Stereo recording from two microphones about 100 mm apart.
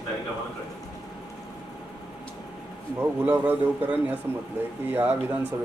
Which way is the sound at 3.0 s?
20° right (ahead or behind).